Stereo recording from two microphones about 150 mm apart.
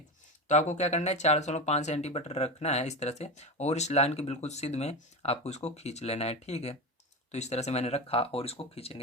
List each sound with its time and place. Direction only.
0.4 s speech: 50° left (ahead or behind)